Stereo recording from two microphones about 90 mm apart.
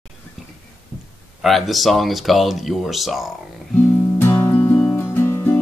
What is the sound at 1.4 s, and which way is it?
Speech, centre (ahead or behind).